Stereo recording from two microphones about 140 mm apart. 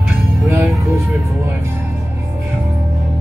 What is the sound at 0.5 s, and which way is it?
Music, 20° right (ahead or behind).